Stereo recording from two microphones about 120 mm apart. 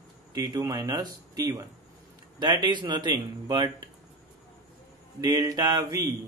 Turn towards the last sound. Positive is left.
turn(degrees=-35)  # may be behind; listen again after turning